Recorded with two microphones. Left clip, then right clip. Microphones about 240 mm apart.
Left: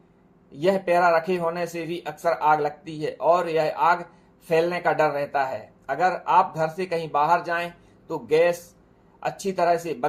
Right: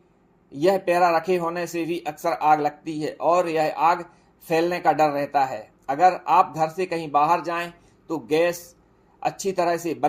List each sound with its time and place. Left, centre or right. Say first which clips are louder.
0.5 s speech: right 1 dB; right